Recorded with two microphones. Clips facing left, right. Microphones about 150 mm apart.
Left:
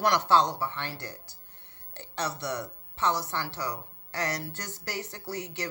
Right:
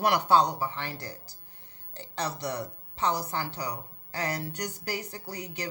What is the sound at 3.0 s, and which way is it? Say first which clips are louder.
Speech: even; 15° right (ahead or behind).